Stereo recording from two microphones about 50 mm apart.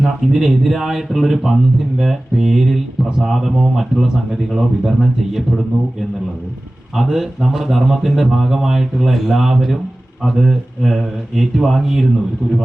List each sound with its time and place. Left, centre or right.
0.0 s speech: centre
6.9 s speech: centre